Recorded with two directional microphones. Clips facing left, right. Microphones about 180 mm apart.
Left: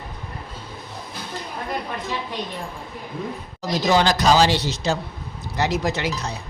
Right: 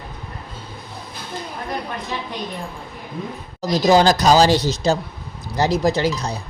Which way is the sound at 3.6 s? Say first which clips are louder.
Right 5 dB; 40° right (ahead or behind).